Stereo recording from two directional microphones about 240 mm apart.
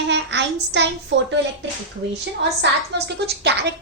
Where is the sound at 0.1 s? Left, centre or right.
Right.